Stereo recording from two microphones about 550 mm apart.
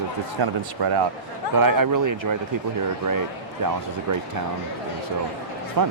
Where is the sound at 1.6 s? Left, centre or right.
Right.